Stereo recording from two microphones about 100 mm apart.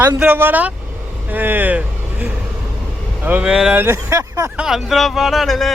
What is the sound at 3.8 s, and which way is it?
Speech, 25° right (ahead or behind).